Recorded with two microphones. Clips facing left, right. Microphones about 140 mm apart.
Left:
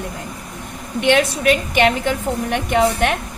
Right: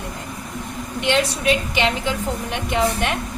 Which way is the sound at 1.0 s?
55° left (ahead or behind).